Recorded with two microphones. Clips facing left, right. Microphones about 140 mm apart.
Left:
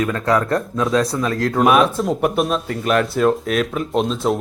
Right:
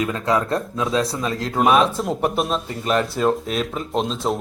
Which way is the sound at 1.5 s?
Centre (ahead or behind).